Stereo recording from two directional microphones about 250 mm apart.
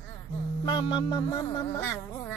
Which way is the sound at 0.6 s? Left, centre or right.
Centre.